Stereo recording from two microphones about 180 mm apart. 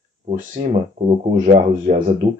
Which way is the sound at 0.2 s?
40° right (ahead or behind).